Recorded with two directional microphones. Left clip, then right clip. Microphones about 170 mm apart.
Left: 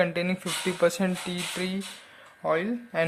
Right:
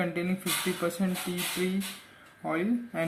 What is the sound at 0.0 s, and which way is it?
Speech, 55° left (ahead or behind).